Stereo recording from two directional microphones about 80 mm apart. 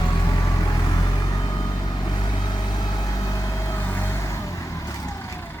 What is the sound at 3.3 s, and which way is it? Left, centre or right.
Vehicle, left.